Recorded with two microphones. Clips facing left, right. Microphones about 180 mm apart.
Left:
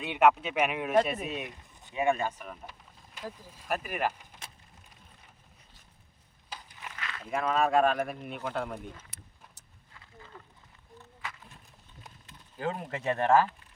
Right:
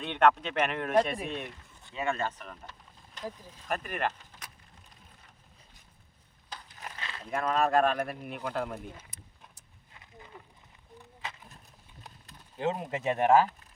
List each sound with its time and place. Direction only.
0.0 s speech: 5° left (ahead or behind)
6.7 s a sound: 35° right (ahead or behind)
7.3 s speech: 5° left (ahead or behind)
9.0 s vehicle: 70° left (ahead or behind)
9.9 s wild animals: 20° right (ahead or behind)
10.9 s a sound: 20° right (ahead or behind)
12.5 s speech: 20° right (ahead or behind)